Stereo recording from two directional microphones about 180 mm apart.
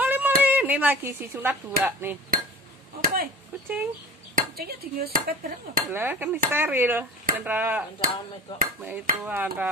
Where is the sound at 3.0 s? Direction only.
55° right (ahead or behind).